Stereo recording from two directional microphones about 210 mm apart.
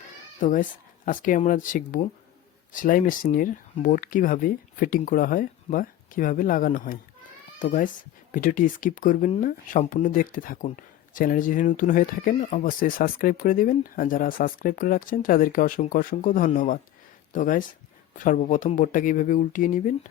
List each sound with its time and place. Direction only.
0.3 s speech: 40° left (ahead or behind)